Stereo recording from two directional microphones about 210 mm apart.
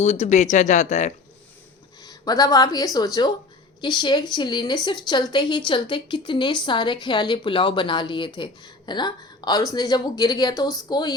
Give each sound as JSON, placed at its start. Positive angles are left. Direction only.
{"t": 0.0, "sound": "speech", "side_deg": 30}
{"t": 2.0, "sound": "a woman's voice", "side_deg": 20}